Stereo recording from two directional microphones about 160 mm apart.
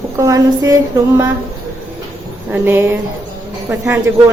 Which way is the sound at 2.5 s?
15° right (ahead or behind).